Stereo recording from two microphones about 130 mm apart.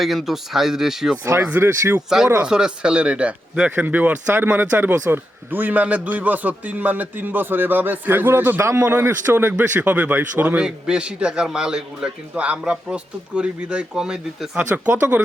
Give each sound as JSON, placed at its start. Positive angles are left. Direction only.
{"t": 0.0, "sound": "speech", "side_deg": 0}
{"t": 1.2, "sound": "speech", "side_deg": -20}
{"t": 2.0, "sound": "a man's voice", "side_deg": -5}